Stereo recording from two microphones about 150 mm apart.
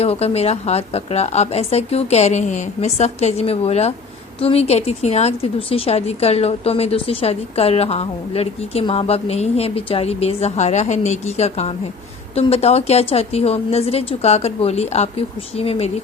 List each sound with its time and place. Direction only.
0.0 s a woman's voice: 45° left (ahead or behind)